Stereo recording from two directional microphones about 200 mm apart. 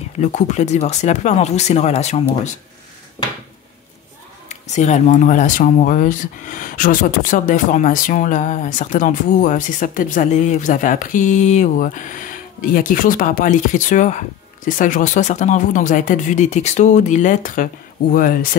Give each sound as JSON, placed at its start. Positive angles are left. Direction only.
{"t": 0.2, "sound": "speech", "side_deg": 35}
{"t": 4.5, "sound": "speech", "side_deg": 35}